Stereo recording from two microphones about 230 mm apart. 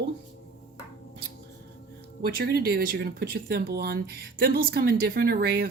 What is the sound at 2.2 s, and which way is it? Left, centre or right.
Speech, right.